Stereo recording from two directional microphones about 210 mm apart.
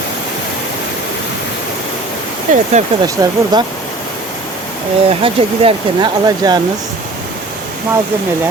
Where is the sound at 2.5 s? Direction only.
40° right (ahead or behind).